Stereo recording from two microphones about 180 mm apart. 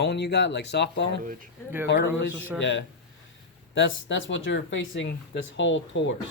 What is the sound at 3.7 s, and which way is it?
Speech, 90° left.